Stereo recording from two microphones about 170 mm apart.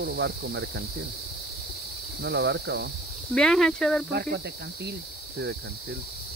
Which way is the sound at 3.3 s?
5° left (ahead or behind).